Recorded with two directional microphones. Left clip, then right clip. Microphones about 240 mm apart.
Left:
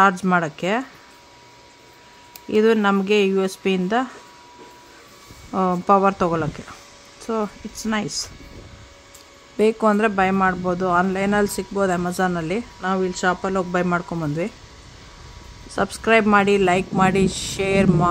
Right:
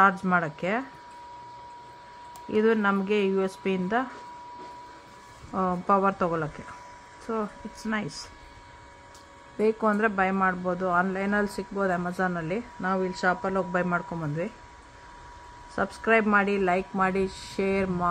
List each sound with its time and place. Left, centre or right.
0.0 s a man's voice: left
2.4 s a man's voice: left
5.5 s a man's voice: left
9.6 s a man's voice: left
15.7 s a man's voice: left